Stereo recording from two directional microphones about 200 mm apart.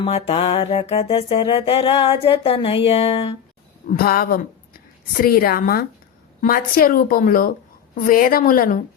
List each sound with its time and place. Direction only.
0.0 s music: 30° left (ahead or behind)
3.8 s a woman's voice: 50° left (ahead or behind)